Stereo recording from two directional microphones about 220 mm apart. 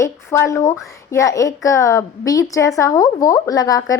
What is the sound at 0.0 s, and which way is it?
A woman's voice, 15° left (ahead or behind).